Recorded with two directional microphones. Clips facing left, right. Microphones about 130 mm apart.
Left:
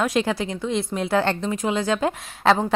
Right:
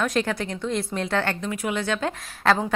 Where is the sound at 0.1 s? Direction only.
10° left (ahead or behind).